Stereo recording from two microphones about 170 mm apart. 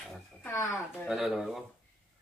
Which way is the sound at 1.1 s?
Centre (ahead or behind).